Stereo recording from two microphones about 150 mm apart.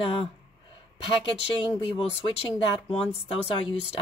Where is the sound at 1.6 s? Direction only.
35° left (ahead or behind).